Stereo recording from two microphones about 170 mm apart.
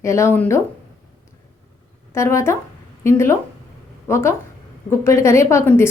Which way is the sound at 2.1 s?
15° left (ahead or behind).